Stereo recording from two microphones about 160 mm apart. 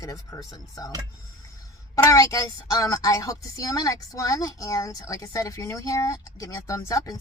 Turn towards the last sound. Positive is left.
turn(degrees=20)  # may be behind; listen again after turning